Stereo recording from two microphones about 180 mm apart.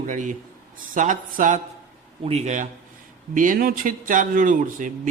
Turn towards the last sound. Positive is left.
turn(degrees=-45)  # may be behind; listen again after turning